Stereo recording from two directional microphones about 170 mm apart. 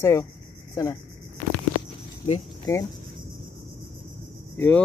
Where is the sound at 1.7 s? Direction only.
30° left (ahead or behind).